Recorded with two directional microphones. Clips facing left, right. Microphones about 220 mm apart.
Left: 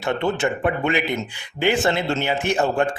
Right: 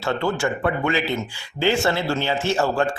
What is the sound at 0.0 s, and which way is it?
Speech, 20° left (ahead or behind).